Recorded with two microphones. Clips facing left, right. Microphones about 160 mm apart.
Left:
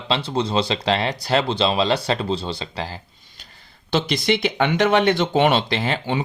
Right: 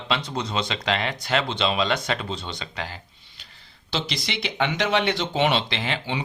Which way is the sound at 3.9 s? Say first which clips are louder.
Left 9 dB; 50° left (ahead or behind).